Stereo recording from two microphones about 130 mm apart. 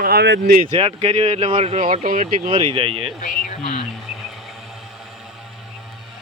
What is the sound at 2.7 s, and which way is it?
Speech, 45° right (ahead or behind).